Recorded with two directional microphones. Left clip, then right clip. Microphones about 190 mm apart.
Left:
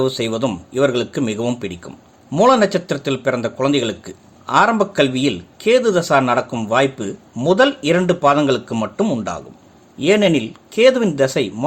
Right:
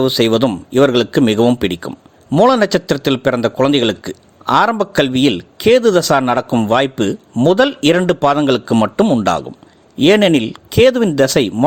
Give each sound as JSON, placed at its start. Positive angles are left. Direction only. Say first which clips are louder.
{"t": 0.0, "sound": "speech", "louder": "right 6 dB", "side_deg": -40}